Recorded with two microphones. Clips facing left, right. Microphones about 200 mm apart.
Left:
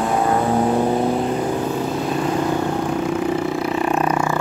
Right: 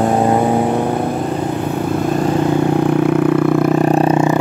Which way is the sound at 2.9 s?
60° right (ahead or behind).